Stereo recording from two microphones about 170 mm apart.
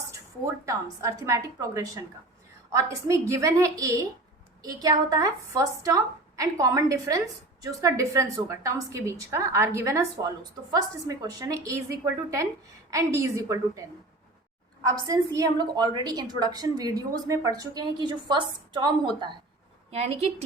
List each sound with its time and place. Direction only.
0.6 s a woman's voice: 20° right (ahead or behind)
14.8 s a woman's voice: 20° right (ahead or behind)